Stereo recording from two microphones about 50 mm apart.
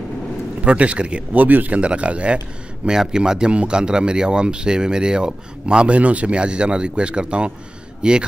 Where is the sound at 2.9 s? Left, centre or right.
Centre.